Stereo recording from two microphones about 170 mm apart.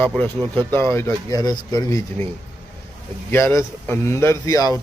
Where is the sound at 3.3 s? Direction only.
15° left (ahead or behind).